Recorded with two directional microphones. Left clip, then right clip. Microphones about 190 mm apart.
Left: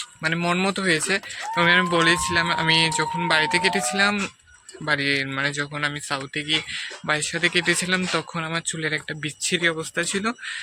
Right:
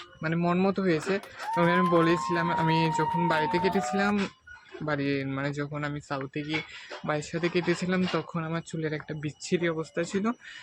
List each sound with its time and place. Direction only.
0.2 s speech: 5° left (ahead or behind)